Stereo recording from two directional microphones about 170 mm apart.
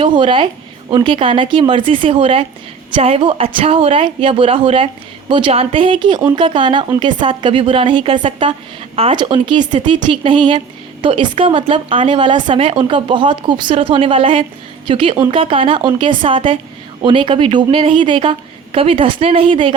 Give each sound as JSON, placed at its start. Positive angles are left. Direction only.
{"t": 0.0, "sound": "a woman's voice", "side_deg": -30}